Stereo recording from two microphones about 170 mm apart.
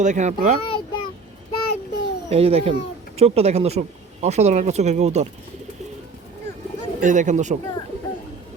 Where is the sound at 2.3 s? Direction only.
35° right (ahead or behind).